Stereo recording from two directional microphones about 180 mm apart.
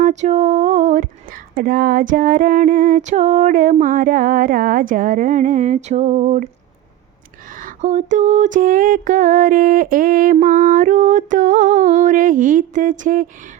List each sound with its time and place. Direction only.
0.0 s female singing: 40° right (ahead or behind)
7.5 s female singing: 45° right (ahead or behind)